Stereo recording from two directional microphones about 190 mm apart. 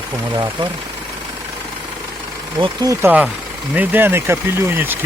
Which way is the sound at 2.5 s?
20° right (ahead or behind).